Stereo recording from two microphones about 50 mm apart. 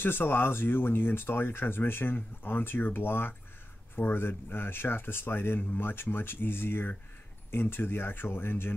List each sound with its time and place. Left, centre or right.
0.0 s speech: left